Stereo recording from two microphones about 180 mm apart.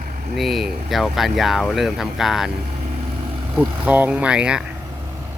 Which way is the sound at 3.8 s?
10° right (ahead or behind).